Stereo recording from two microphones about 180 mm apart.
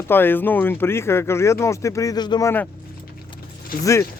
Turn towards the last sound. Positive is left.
turn(degrees=50)  # may be behind; listen again after turning